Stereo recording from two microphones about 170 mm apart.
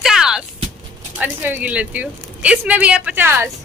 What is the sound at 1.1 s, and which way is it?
Speech, 10° right (ahead or behind).